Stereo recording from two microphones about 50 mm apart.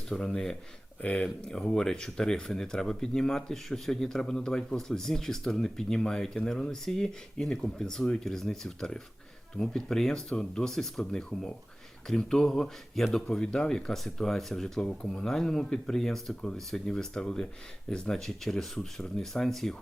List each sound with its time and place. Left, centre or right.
0.1 s speech: centre